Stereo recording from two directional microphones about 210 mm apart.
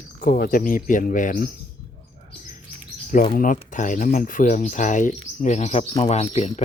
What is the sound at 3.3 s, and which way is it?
Speech, 40° left (ahead or behind).